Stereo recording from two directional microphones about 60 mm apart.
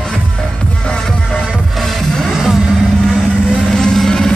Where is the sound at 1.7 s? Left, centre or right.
Centre.